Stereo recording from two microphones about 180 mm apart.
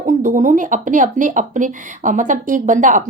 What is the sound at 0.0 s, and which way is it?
Speech, 45° right (ahead or behind).